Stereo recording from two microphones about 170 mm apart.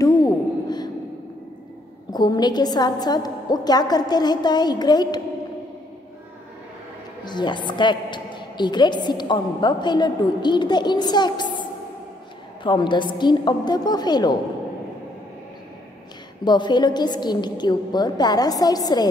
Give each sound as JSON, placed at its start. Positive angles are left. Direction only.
{"t": 0.0, "sound": "a sound", "side_deg": 20}
{"t": 2.1, "sound": "a woman's voice", "side_deg": 25}
{"t": 7.2, "sound": "a woman's voice", "side_deg": 25}
{"t": 12.6, "sound": "a woman's voice", "side_deg": 25}
{"t": 16.4, "sound": "a woman's voice", "side_deg": 25}